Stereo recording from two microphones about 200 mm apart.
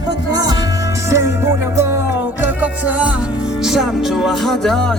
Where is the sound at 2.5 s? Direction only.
10° right (ahead or behind).